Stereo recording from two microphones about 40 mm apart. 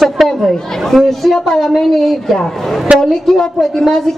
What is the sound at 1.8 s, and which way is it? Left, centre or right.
A woman's voice, centre.